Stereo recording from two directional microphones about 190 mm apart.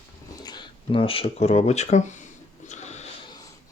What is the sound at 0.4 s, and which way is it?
Speech, 25° left (ahead or behind).